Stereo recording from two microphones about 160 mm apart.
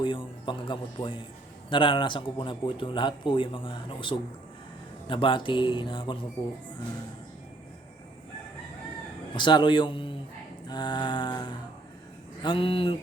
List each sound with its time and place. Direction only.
0.0 s a man's voice: 30° left (ahead or behind)
9.3 s mantra: 30° left (ahead or behind)
12.4 s a man's voice: 30° left (ahead or behind)